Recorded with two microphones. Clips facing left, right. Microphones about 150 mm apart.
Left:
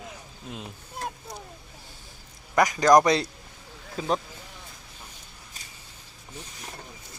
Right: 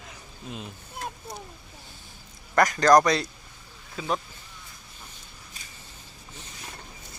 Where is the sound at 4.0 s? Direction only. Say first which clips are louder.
Left 2 dB; 40° left (ahead or behind).